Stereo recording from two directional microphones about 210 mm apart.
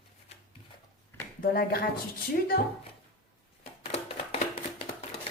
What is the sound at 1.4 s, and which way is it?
A woman's voice, 45° left (ahead or behind).